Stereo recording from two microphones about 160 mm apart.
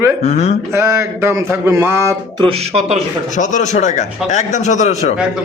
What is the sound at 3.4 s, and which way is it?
A man's voice, 50° left (ahead or behind).